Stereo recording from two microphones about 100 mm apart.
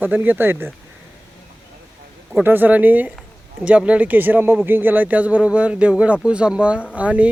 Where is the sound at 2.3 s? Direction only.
20° right (ahead or behind).